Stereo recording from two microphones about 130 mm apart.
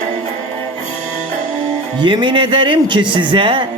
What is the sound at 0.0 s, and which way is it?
Music, 65° right (ahead or behind).